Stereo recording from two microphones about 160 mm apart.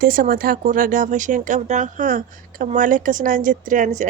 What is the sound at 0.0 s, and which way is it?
Speech, 60° right (ahead or behind).